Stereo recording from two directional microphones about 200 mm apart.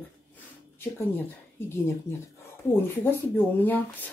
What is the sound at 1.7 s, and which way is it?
Speech, 15° left (ahead or behind).